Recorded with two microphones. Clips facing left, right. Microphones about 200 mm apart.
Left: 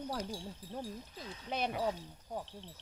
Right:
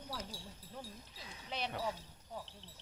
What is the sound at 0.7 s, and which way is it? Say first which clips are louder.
Speech: left 7 dB; 50° left (ahead or behind).